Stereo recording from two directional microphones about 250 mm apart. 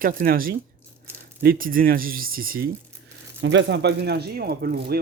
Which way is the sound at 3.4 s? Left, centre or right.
Right.